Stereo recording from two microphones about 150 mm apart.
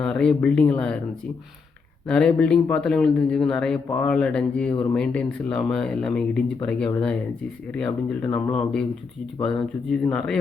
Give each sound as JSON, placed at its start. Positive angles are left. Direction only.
{"t": 0.0, "sound": "speech", "side_deg": 5}
{"t": 2.0, "sound": "a man's voice", "side_deg": 5}
{"t": 4.7, "sound": "speech", "side_deg": 30}
{"t": 4.9, "sound": "a man's voice", "side_deg": 5}